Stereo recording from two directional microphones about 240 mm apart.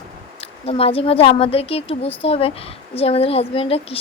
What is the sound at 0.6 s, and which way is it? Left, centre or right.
A woman's voice, left.